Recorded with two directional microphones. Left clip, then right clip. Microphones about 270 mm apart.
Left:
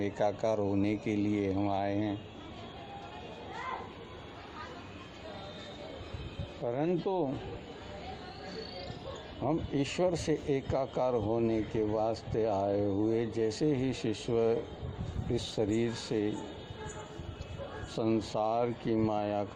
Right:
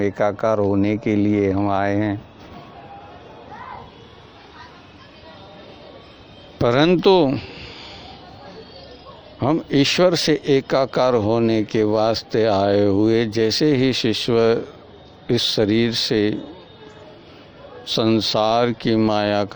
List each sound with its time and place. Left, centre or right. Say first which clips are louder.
0.0 s speech: right 11 dB; right
6.7 s speech: right 17 dB; right
9.4 s speech: right 14 dB; right
17.8 s speech: right 14 dB; right